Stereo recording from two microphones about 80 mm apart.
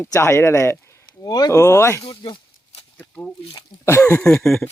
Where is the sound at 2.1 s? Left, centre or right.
Left.